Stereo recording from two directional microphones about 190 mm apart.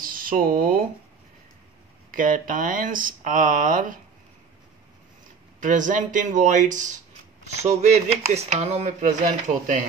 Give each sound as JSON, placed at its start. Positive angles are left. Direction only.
{"t": 0.0, "sound": "speech", "side_deg": -45}
{"t": 2.0, "sound": "speech", "side_deg": -45}
{"t": 5.6, "sound": "speech", "side_deg": -45}